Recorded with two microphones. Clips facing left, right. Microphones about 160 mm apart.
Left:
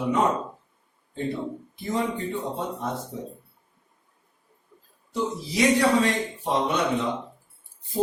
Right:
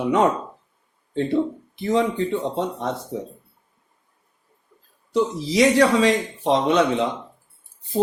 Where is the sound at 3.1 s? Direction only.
90° right.